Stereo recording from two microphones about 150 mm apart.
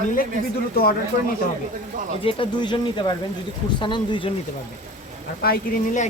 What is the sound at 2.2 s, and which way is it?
Speech, 35° left (ahead or behind).